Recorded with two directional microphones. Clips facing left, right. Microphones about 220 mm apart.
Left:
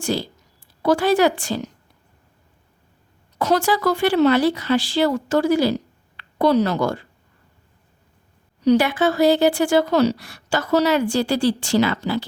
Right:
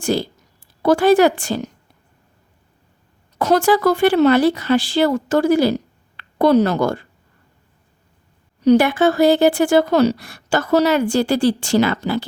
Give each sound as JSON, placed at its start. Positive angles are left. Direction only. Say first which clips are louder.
{"t": 0.0, "sound": "speech", "louder": "right 4 dB", "side_deg": -50}
{"t": 3.3, "sound": "speech", "louder": "right 4 dB", "side_deg": -50}
{"t": 8.6, "sound": "speech", "louder": "right 3 dB", "side_deg": -50}